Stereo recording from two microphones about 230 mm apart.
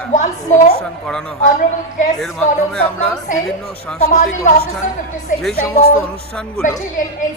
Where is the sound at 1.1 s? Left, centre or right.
Centre.